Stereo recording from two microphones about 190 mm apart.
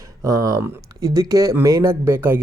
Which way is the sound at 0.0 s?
20° right (ahead or behind).